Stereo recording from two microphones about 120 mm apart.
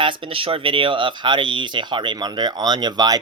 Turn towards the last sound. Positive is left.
turn(degrees=-35)  # may be behind; listen again after turning